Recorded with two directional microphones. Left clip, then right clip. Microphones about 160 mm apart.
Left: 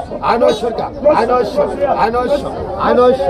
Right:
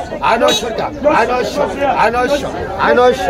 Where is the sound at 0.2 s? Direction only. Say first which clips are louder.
Even; 50° right (ahead or behind).